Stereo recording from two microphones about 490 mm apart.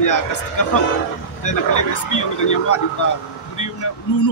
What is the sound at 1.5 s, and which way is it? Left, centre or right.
Speech, left.